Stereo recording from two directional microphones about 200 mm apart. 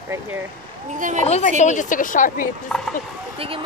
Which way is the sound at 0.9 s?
40° right (ahead or behind).